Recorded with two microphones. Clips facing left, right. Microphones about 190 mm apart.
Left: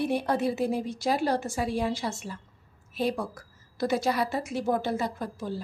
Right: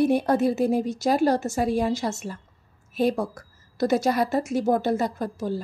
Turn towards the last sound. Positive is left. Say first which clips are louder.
# right 5 dB
turn(degrees=-45)  # may be behind; listen again after turning